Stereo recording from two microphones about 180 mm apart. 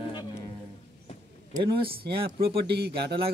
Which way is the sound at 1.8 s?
60° right (ahead or behind).